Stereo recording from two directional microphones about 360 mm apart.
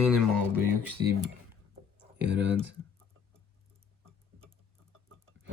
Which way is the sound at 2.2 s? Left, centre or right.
Right.